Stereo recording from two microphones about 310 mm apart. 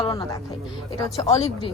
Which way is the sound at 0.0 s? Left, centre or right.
Centre.